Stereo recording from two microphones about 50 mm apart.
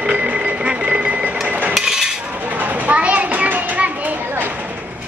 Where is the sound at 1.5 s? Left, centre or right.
Right.